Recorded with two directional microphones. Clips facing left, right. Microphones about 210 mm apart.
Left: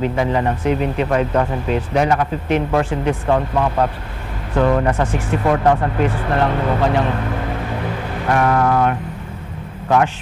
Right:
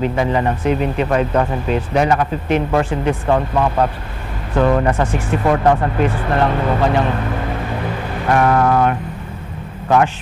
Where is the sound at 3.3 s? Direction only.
25° right (ahead or behind).